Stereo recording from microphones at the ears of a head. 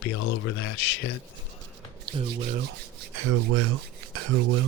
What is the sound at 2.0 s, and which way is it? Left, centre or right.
Rub, right.